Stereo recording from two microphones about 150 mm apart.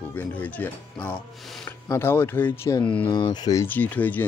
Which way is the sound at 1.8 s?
15° left (ahead or behind).